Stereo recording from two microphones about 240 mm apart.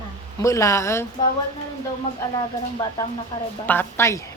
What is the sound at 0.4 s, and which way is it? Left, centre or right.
Speech, centre.